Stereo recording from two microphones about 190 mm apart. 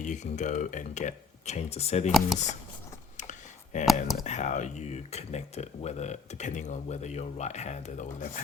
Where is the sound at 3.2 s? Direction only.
40° left (ahead or behind).